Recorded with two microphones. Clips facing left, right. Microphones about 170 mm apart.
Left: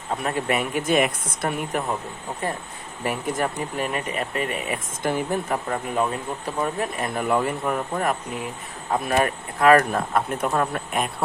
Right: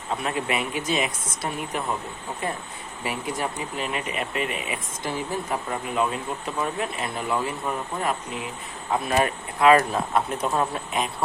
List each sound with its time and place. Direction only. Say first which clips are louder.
0.3 s speech: left 4 dB; 40° left (ahead or behind)
3.0 s speech: left 4 dB; 50° left (ahead or behind)